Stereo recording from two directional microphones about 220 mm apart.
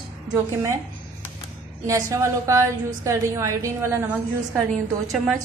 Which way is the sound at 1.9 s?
15° right (ahead or behind).